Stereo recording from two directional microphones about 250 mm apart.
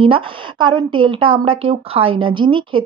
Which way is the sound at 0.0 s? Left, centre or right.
Centre.